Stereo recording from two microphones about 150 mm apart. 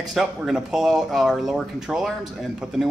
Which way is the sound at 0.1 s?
5° right (ahead or behind).